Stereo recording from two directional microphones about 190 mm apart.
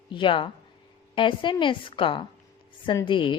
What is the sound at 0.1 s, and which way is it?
A woman's voice, 25° left (ahead or behind).